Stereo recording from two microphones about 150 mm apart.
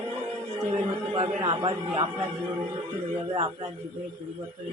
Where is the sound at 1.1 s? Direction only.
35° right (ahead or behind).